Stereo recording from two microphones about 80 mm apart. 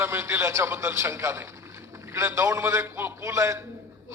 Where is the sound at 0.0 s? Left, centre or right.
Right.